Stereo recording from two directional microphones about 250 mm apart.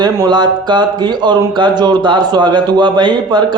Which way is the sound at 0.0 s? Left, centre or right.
Centre.